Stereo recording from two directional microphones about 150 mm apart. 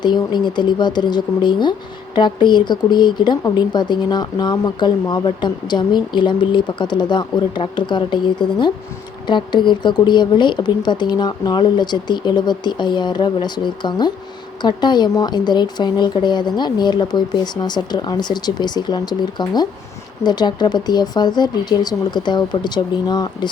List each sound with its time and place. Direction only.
0.0 s speech: 30° left (ahead or behind)